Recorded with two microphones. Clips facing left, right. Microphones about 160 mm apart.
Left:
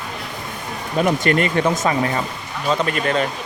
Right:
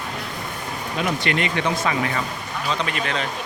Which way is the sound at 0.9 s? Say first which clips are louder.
Left 6 dB; 45° left (ahead or behind).